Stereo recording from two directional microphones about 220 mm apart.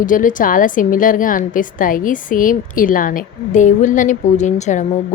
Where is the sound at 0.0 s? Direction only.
35° left (ahead or behind).